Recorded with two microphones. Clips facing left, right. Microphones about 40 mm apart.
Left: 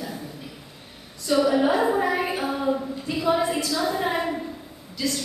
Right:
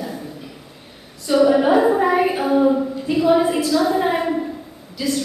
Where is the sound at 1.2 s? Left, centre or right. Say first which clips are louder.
Right 5 dB; centre.